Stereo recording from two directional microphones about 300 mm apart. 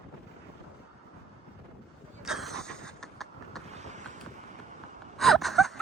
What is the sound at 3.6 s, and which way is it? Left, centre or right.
Vehicle, right.